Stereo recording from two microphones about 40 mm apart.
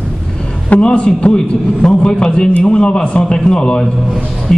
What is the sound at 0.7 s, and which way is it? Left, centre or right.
Speech, left.